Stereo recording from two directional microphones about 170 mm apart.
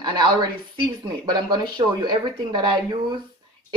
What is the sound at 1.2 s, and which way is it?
Speech, 25° right (ahead or behind).